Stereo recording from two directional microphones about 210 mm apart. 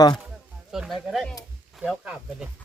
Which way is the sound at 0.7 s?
Centre (ahead or behind).